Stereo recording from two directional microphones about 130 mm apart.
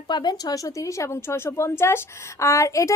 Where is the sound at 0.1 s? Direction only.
35° left (ahead or behind).